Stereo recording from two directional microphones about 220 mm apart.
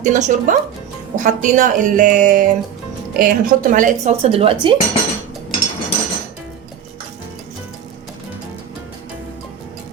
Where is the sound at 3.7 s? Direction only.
30° right (ahead or behind).